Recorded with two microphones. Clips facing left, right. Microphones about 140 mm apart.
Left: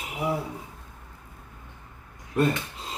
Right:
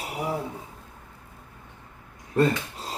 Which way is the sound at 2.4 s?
35° right (ahead or behind).